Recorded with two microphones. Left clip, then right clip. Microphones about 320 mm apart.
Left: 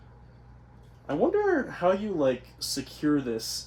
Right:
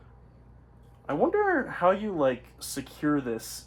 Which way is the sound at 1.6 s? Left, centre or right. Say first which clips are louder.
Right 1 dB; centre.